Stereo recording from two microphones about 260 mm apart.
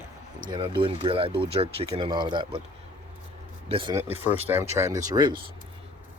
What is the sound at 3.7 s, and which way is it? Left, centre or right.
Speech, centre.